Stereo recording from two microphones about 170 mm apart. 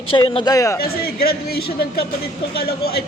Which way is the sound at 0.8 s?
60° left (ahead or behind).